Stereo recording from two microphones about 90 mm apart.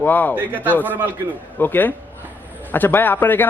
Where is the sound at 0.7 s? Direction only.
20° left (ahead or behind).